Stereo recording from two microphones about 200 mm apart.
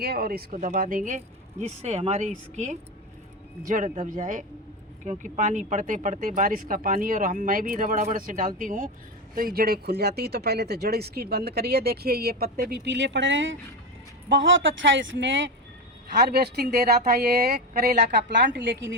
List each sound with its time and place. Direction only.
0.0 s speech: 50° right (ahead or behind); by 15.5 s 70° right (ahead or behind)
16.1 s speech: 55° right (ahead or behind)
18.5 s a woman's voice: 65° right (ahead or behind)